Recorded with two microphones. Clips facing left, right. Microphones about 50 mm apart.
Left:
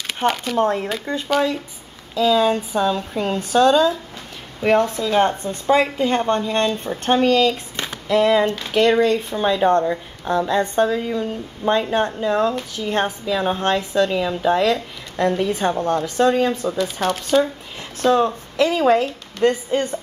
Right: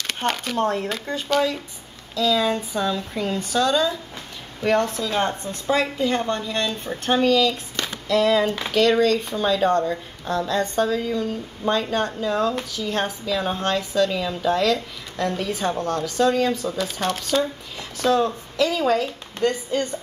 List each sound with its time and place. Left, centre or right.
0.0 s speech: centre
2.1 s speech: left
2.9 s speech: left
4.7 s speech: centre
5.4 s speech: left
7.2 s a sound: left
8.7 s speech: centre
16.7 s speech: centre
17.4 s a sound: left
18.1 s speech: left